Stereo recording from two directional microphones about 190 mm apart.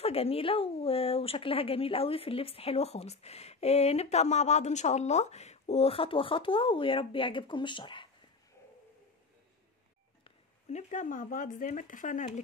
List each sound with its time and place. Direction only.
0.0 s speech: 30° left (ahead or behind)
10.2 s speech: 35° left (ahead or behind)